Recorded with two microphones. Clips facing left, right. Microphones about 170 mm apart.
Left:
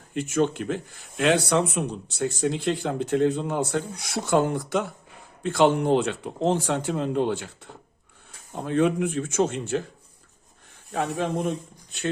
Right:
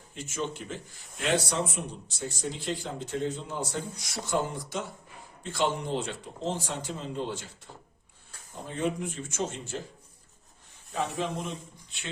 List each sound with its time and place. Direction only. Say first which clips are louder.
0.1 s speech: left 11 dB; 60° left (ahead or behind)
10.9 s speech: left 5 dB; 60° left (ahead or behind)